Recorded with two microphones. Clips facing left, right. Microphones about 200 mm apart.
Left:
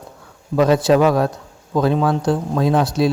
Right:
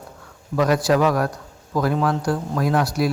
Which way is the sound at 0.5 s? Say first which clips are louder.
Left 4 dB; 25° left (ahead or behind).